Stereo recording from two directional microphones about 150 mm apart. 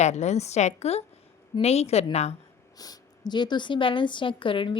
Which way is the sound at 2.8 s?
25° left (ahead or behind).